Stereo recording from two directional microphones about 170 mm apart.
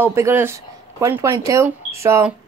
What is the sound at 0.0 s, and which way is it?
A woman's voice, 15° right (ahead or behind).